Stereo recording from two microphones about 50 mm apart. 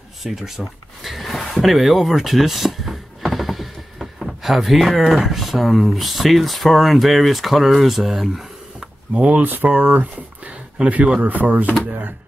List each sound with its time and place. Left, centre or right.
0.2 s a sound: centre
5.2 s speech: centre
9.1 s speech: right
9.4 s speech: right